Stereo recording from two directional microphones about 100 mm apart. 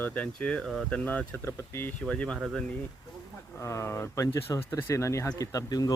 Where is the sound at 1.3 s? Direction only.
25° left (ahead or behind).